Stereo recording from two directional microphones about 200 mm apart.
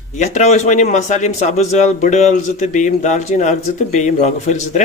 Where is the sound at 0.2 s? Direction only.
35° left (ahead or behind).